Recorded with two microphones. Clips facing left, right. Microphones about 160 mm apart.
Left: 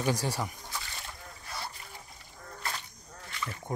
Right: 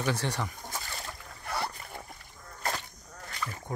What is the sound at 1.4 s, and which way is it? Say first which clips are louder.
Boat: right 8 dB; 65° right (ahead or behind).